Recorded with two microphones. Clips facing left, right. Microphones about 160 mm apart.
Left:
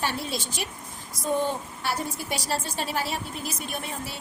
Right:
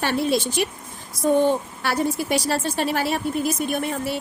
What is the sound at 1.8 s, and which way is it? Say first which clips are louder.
A woman's voice: right 7 dB; 70° right (ahead or behind).